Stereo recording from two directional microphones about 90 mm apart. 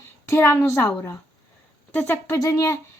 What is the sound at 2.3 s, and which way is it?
Speech, 35° left (ahead or behind).